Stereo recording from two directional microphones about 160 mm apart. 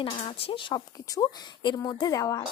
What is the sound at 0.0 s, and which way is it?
Speech, 35° left (ahead or behind).